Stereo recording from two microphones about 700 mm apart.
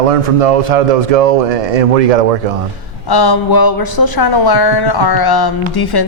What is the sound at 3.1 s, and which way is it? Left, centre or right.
A man's voice, left.